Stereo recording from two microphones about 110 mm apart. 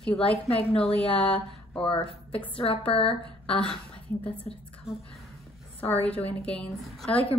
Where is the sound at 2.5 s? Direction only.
60° left (ahead or behind).